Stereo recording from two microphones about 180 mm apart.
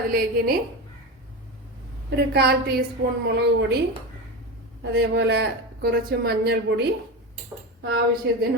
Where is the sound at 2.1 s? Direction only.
65° right (ahead or behind).